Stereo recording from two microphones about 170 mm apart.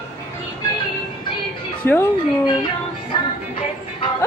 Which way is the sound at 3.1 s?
30° left (ahead or behind).